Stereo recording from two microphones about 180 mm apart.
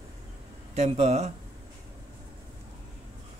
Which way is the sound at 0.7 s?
35° right (ahead or behind).